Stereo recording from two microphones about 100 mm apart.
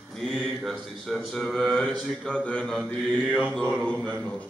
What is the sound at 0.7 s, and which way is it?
Speech, centre (ahead or behind).